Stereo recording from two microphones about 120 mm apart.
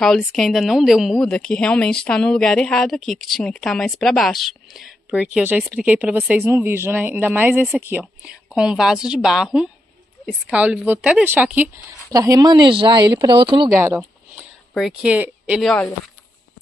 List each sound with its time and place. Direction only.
0.0 s a woman's voice: centre (ahead or behind); by 11.7 s 15° right (ahead or behind)
12.1 s speech: 30° right (ahead or behind)
13.7 s speech: 20° right (ahead or behind)
15.6 s speech: 10° left (ahead or behind)